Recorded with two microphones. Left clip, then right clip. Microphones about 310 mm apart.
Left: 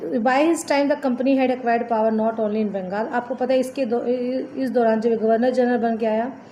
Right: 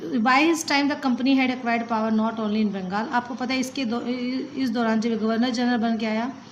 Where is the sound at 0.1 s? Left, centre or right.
Right.